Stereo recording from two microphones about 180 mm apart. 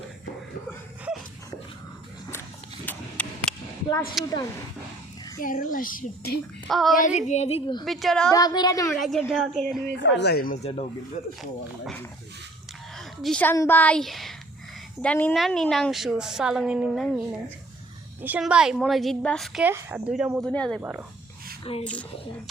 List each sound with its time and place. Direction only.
2.8 s a sound: 5° left (ahead or behind)
4.2 s a woman's voice: centre (ahead or behind)
5.4 s a child's voice: 50° left (ahead or behind)
6.7 s a woman's voice: centre (ahead or behind)
6.9 s speech: 45° left (ahead or behind)
7.9 s a woman's voice: centre (ahead or behind)
8.3 s speech: 20° left (ahead or behind)
8.9 s a woman's voice: centre (ahead or behind)
10.0 s speech: 70° left (ahead or behind)
10.6 s speech: 35° left (ahead or behind)
13.2 s a woman's voice: 10° left (ahead or behind)
19.6 s speech: 10° right (ahead or behind)
20.4 s a woman's voice: 5° left (ahead or behind)
21.6 s speech: 30° left (ahead or behind)